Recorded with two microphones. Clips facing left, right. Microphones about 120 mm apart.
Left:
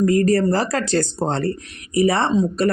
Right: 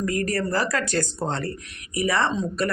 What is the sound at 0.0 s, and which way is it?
Speech, 30° left (ahead or behind).